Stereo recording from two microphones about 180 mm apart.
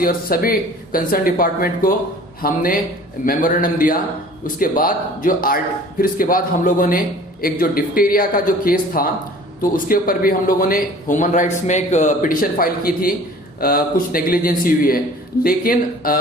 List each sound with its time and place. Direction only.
0.0 s a man's voice: 55° left (ahead or behind)